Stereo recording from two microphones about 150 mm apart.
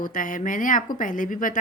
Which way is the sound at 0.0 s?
65° left (ahead or behind).